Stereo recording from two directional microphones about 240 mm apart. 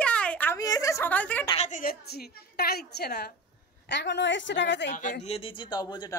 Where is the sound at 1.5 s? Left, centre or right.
Left.